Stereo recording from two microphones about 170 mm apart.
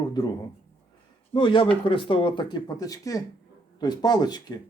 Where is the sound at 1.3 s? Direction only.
30° left (ahead or behind).